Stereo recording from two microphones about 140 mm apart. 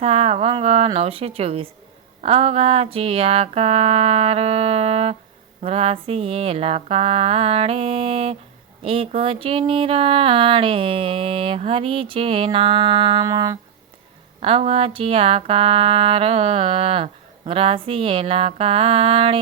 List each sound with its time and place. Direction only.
0.0 s music: 45° right (ahead or behind)
8.8 s a sound: 40° right (ahead or behind)
14.4 s music: 45° right (ahead or behind)